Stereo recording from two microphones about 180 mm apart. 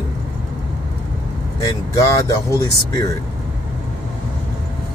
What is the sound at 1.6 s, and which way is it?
Speech, 20° left (ahead or behind).